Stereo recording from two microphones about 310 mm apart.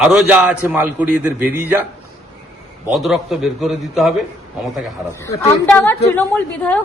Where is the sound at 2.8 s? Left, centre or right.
Centre.